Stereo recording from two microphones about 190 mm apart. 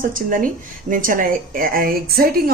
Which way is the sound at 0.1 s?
45° right (ahead or behind).